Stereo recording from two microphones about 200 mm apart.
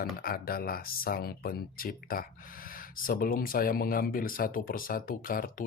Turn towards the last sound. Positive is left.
turn(degrees=45)  # may be behind; listen again after turning